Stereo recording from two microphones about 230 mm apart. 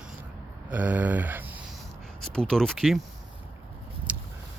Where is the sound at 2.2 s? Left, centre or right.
Centre.